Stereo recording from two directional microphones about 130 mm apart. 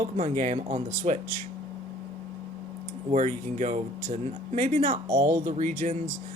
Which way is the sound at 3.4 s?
75° right (ahead or behind).